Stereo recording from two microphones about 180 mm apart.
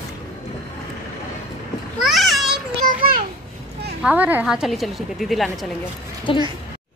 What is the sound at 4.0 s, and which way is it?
A woman's voice, 5° right (ahead or behind).